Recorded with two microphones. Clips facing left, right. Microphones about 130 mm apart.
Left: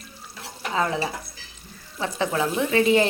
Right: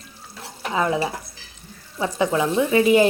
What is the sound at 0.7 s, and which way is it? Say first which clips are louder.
A woman's voice: right 3 dB; 15° right (ahead or behind).